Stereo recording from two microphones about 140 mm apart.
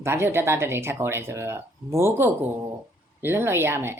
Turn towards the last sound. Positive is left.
turn(degrees=-15)  # may be behind; listen again after turning